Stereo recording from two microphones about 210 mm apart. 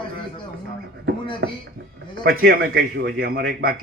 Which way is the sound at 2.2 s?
50° right (ahead or behind).